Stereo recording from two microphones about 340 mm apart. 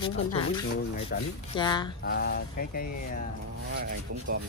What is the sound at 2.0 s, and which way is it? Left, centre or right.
Speech, left.